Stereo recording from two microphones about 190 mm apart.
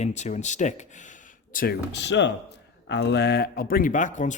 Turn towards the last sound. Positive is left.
turn(degrees=40)  # may be behind; listen again after turning